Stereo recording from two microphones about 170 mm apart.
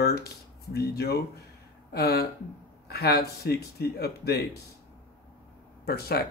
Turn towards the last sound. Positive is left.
turn(degrees=65)  # may be behind; listen again after turning